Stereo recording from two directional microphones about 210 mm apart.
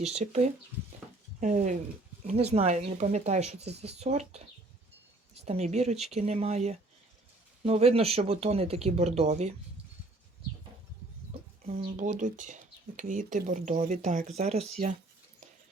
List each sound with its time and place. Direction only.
0.0 s speech: 30° right (ahead or behind)
11.8 s speech: 35° right (ahead or behind)